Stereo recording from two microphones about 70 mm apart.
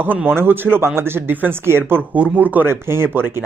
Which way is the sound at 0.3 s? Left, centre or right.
Right.